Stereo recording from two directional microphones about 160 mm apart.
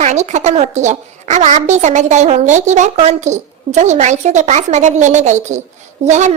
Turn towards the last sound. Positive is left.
turn(degrees=-45)  # may be behind; listen again after turning